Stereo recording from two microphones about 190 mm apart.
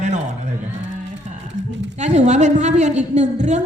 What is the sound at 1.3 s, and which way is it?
Music, 35° right (ahead or behind).